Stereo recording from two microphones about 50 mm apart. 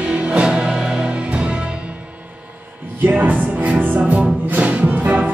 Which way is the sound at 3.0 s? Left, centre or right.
Right.